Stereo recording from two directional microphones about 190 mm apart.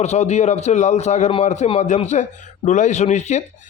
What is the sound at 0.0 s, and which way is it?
Speech, 35° left (ahead or behind).